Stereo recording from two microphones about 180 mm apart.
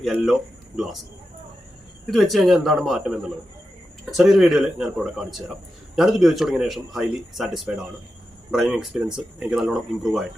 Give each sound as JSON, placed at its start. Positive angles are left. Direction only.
{"t": 0.0, "sound": "speech", "side_deg": 0}
{"t": 2.0, "sound": "speech", "side_deg": 0}